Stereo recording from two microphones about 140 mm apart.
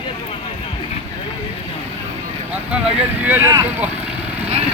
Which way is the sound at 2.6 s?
10° right (ahead or behind).